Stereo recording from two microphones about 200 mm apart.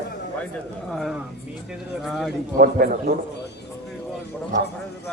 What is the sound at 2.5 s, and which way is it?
Speech, 50° right (ahead or behind).